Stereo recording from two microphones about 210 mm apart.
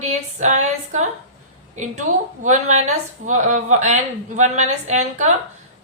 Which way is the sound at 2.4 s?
35° right (ahead or behind).